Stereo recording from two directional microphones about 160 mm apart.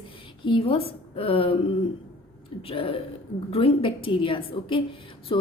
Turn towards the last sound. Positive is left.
turn(degrees=30)  # may be behind; listen again after turning